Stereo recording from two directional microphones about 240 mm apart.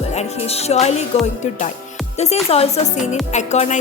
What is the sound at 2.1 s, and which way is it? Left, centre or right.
Music, left.